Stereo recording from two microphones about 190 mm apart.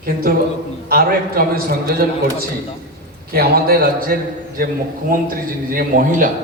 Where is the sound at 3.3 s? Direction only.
55° right (ahead or behind).